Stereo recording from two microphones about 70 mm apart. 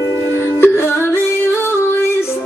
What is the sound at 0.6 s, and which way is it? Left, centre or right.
Music, left.